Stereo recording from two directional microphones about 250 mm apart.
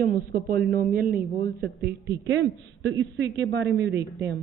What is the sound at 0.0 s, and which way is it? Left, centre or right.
A woman's voice, right.